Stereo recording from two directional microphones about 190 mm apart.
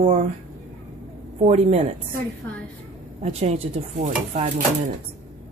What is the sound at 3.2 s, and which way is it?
A woman's voice, 35° right (ahead or behind).